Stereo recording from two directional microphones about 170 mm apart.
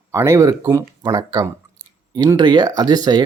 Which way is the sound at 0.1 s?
15° right (ahead or behind).